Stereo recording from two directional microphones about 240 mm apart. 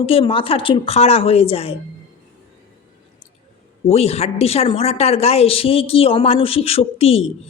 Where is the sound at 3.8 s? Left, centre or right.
Left.